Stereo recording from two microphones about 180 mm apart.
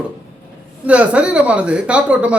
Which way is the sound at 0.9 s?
5° right (ahead or behind).